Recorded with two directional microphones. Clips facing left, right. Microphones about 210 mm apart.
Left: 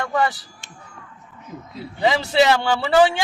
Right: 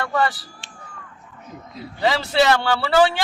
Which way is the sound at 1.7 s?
20° left (ahead or behind).